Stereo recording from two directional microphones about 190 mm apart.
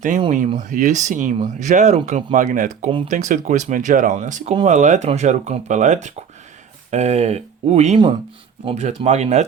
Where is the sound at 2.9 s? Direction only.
30° right (ahead or behind).